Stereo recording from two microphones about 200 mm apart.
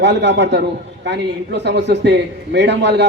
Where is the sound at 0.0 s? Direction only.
60° right (ahead or behind).